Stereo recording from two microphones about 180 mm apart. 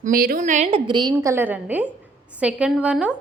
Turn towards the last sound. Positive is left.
turn(degrees=-5)  # may be behind; listen again after turning